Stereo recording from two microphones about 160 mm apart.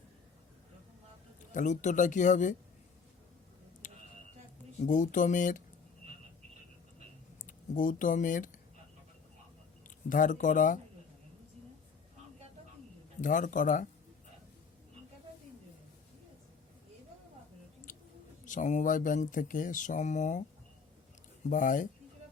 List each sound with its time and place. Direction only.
1.5 s speech: 50° left (ahead or behind)
3.8 s a sound: 50° left (ahead or behind)
4.8 s speech: 50° left (ahead or behind)
7.4 s speech: 55° left (ahead or behind)
10.1 s speech: 55° left (ahead or behind)
13.2 s speech: 55° left (ahead or behind)
18.4 s speech: 50° left (ahead or behind)
21.5 s speech: 55° left (ahead or behind)